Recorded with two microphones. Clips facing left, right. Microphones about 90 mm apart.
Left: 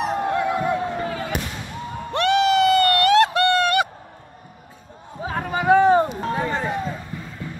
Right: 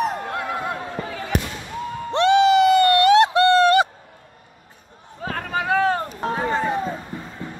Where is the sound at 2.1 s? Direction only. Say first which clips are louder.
Right 3 dB; 25° right (ahead or behind).